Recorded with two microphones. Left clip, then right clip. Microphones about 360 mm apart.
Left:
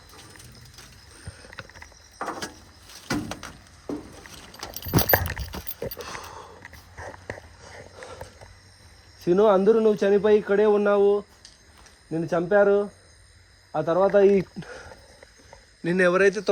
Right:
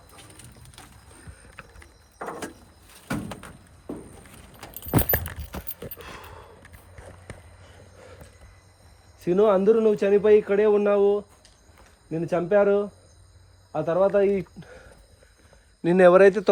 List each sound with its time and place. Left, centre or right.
4.9 s keys jangling: centre
9.2 s speech: centre
15.8 s speech: centre